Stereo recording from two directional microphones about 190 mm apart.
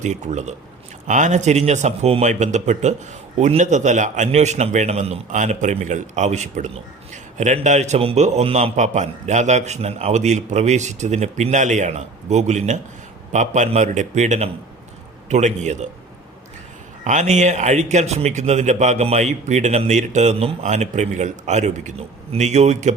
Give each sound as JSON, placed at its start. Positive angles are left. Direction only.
{"t": 0.0, "sound": "a man's voice", "side_deg": -40}
{"t": 17.0, "sound": "a man's voice", "side_deg": -40}